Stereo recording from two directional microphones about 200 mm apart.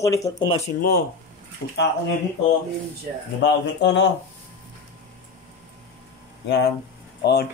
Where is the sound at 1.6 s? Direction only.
55° left (ahead or behind).